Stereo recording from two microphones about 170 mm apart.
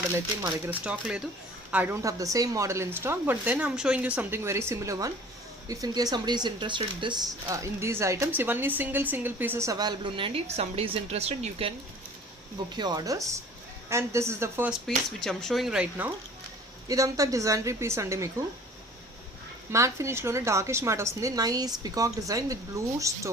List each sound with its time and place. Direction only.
0.4 s a woman's voice: 10° right (ahead or behind); by 7.2 s 30° right (ahead or behind)
7.4 s speech: 15° right (ahead or behind); by 11.7 s 40° right (ahead or behind)
12.7 s a woman's voice: 25° right (ahead or behind)
14.7 s speech: centre (ahead or behind)
16.9 s speech: 20° right (ahead or behind)
19.7 s speech: 15° right (ahead or behind)